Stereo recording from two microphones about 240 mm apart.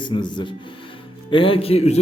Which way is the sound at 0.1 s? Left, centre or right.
Centre.